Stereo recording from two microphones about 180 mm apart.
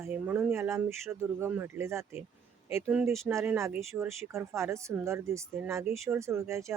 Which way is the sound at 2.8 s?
5° right (ahead or behind).